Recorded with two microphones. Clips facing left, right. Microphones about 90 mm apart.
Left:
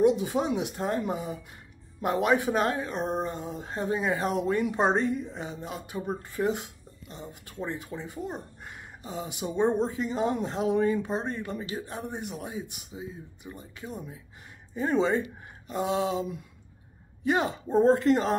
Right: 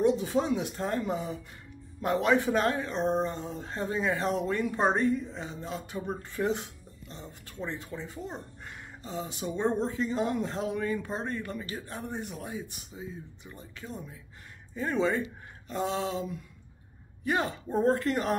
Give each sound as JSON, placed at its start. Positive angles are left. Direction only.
{"t": 0.0, "sound": "speech", "side_deg": 15}